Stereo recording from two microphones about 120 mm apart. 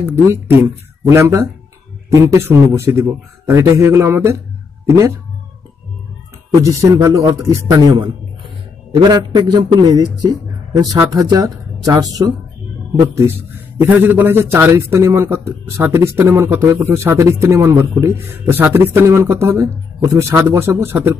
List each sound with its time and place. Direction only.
1.0 s a man's voice: 25° right (ahead or behind)
6.6 s a man's voice: 25° right (ahead or behind)
13.7 s a man's voice: 15° right (ahead or behind)